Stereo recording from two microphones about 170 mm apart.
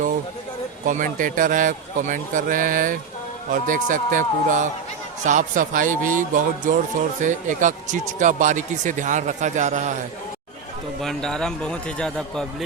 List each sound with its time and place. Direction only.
0.9 s speech: 50° right (ahead or behind)
11.0 s a man's voice: centre (ahead or behind)